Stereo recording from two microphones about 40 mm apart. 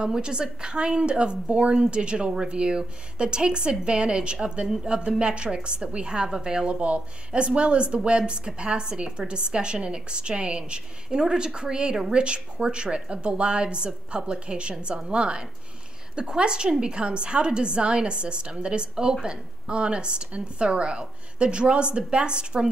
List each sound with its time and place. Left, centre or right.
0.0 s speech: right